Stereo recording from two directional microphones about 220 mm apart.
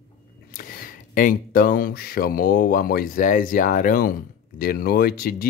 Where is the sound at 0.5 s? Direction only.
40° left (ahead or behind).